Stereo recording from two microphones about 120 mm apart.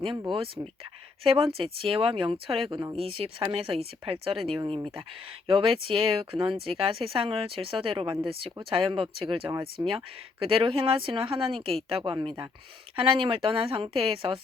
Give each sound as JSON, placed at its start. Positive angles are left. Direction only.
{"t": 0.3, "sound": "speech", "side_deg": -50}
{"t": 9.8, "sound": "speech", "side_deg": -40}
{"t": 10.4, "sound": "speech", "side_deg": -50}